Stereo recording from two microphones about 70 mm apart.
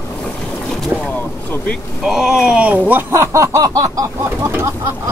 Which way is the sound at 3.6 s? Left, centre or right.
Right.